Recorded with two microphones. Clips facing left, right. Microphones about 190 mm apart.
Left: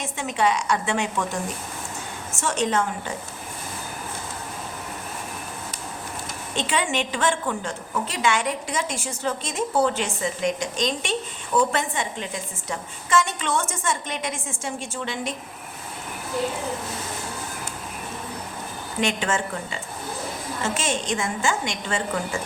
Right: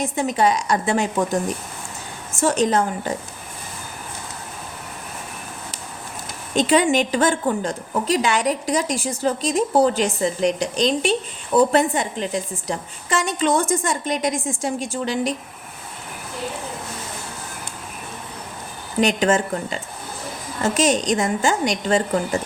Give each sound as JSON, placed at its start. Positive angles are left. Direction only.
{"t": 0.0, "sound": "a woman's voice", "side_deg": -40}
{"t": 2.4, "sound": "a woman's voice", "side_deg": -35}
{"t": 6.5, "sound": "a woman's voice", "side_deg": -40}
{"t": 18.9, "sound": "a woman's voice", "side_deg": -35}